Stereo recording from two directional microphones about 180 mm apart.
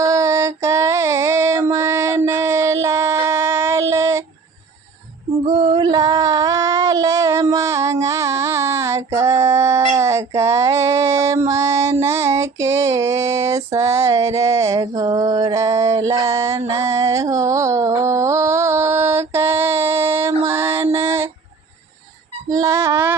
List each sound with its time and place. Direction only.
0.0 s female singing: 20° right (ahead or behind)
5.5 s female singing: 25° right (ahead or behind)
9.9 s a sound: 15° right (ahead or behind)
11.4 s female singing: 15° right (ahead or behind)
16.2 s music: 15° right (ahead or behind)
22.4 s music: 20° right (ahead or behind)